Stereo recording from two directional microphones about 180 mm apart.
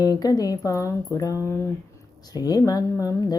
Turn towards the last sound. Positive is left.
turn(degrees=20)  # may be behind; listen again after turning